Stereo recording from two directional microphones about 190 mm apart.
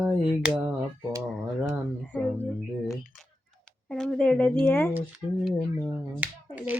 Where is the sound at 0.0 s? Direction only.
5° right (ahead or behind).